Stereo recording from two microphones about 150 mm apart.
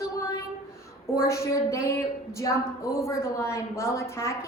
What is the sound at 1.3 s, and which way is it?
A woman's voice, 20° left (ahead or behind).